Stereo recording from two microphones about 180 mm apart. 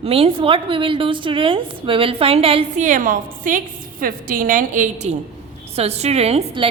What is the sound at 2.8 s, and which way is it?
A woman's voice, 45° right (ahead or behind).